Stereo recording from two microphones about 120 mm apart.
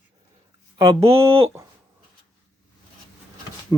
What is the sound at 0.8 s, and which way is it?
Speech, 30° right (ahead or behind).